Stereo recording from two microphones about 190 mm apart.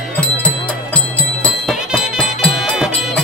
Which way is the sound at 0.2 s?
5° left (ahead or behind).